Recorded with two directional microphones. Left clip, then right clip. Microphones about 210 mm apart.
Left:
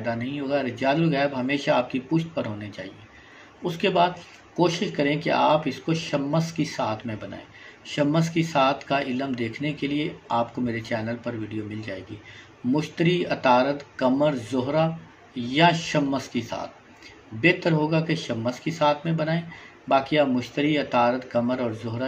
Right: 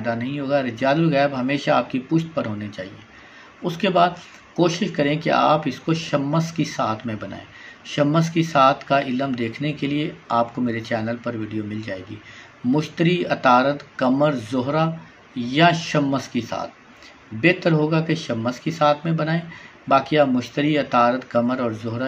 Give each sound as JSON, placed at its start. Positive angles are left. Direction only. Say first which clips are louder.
{"t": 0.0, "sound": "speech", "louder": "right 3 dB", "side_deg": -15}
{"t": 12.7, "sound": "speech", "louder": "right 2 dB", "side_deg": -20}